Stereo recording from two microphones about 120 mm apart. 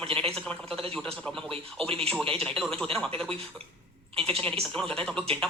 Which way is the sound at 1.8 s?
55° right (ahead or behind).